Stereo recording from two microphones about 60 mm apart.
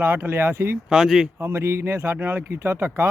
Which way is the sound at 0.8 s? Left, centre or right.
Centre.